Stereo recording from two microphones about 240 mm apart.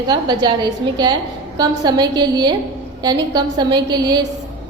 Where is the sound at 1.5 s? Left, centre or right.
Centre.